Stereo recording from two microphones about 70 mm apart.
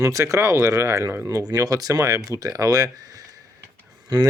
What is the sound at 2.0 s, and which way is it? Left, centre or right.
Speech, right.